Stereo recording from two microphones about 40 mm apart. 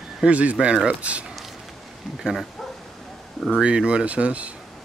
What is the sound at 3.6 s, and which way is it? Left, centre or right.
Speech, right.